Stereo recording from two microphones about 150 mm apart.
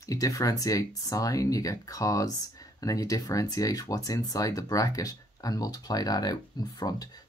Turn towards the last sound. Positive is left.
turn(degrees=25)  # may be behind; listen again after turning